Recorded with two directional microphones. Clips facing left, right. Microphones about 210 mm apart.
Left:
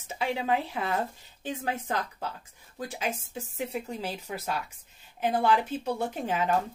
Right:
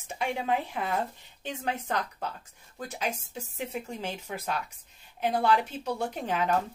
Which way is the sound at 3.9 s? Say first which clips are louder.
Left 1 dB; 35° left (ahead or behind).